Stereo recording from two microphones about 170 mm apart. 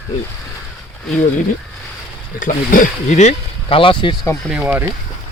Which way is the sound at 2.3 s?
50° left (ahead or behind).